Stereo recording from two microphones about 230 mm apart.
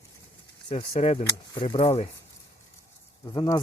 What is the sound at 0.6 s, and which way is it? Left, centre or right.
Speech, left.